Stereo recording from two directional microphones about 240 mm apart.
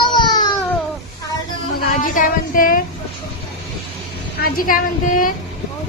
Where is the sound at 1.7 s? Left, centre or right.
Left.